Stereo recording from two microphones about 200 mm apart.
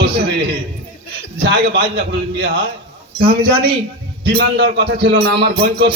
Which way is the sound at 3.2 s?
25° right (ahead or behind).